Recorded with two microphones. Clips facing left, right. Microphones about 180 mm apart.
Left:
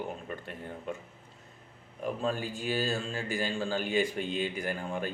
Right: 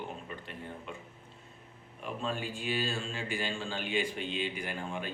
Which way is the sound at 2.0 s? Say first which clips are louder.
Left 4 dB; 40° left (ahead or behind).